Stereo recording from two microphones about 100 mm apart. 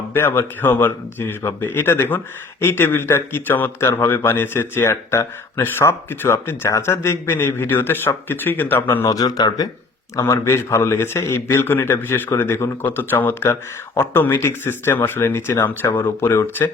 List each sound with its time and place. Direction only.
0.1 s a man's voice: 25° left (ahead or behind)
9.0 s speech: 40° left (ahead or behind)
10.2 s a man's voice: 30° left (ahead or behind)